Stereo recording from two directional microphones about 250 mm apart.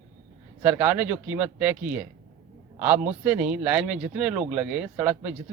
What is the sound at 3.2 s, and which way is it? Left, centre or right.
Speech, centre.